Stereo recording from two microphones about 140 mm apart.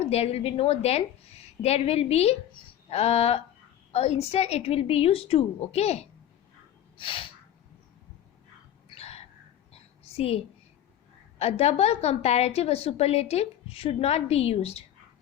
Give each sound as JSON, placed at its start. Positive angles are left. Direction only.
{"t": 0.0, "sound": "a woman's voice", "side_deg": 45}
{"t": 6.9, "sound": "gasp", "side_deg": 40}
{"t": 8.9, "sound": "a sound", "side_deg": 50}
{"t": 10.2, "sound": "a woman's voice", "side_deg": 45}